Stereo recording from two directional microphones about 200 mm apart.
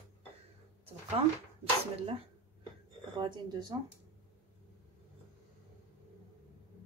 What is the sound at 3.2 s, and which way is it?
Speech, 20° right (ahead or behind).